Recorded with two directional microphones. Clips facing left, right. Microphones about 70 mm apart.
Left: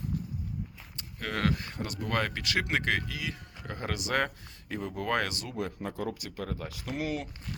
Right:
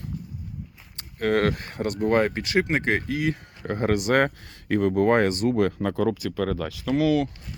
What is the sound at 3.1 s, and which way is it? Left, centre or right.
Speech, right.